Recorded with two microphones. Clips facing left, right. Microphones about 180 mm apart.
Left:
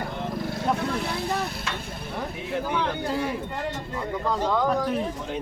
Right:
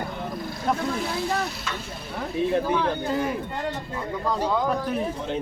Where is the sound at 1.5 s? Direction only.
55° left (ahead or behind).